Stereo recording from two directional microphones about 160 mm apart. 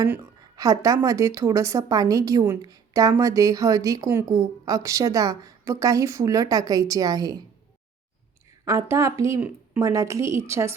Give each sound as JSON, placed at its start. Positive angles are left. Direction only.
{"t": 0.0, "sound": "a woman's voice", "side_deg": -20}
{"t": 8.6, "sound": "a woman's voice", "side_deg": -20}